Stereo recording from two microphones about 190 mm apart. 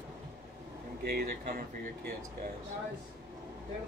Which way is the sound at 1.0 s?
50° right (ahead or behind).